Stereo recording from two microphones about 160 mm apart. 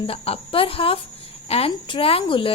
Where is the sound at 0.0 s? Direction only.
35° left (ahead or behind).